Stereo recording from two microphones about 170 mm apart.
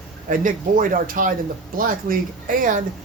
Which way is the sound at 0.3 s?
50° right (ahead or behind).